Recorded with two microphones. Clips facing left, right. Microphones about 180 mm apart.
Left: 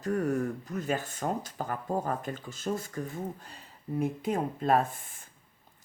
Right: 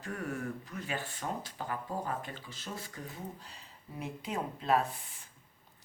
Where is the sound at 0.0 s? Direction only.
40° left (ahead or behind).